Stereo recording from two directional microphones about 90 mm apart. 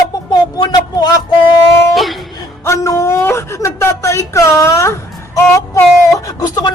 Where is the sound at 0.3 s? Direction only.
50° left (ahead or behind).